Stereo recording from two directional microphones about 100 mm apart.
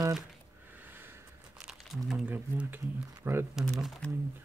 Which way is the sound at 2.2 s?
20° right (ahead or behind).